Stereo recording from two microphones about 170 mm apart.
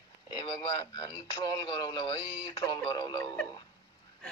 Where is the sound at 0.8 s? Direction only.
25° left (ahead or behind).